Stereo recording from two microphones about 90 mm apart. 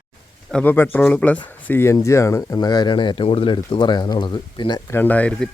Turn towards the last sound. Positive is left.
turn(degrees=10)  # may be behind; listen again after turning